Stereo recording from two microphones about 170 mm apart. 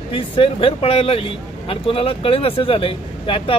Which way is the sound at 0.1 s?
30° left (ahead or behind).